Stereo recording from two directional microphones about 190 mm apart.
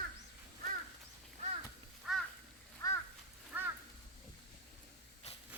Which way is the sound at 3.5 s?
10° right (ahead or behind).